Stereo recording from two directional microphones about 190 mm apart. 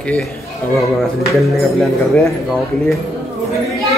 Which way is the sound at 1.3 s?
Centre (ahead or behind).